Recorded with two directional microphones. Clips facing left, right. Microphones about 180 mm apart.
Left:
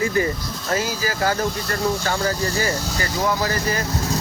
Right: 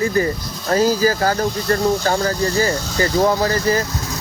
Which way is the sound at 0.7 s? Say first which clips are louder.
Right 8 dB; 40° right (ahead or behind).